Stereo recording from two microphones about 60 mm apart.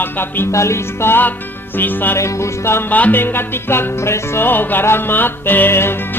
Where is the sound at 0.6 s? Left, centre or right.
Left.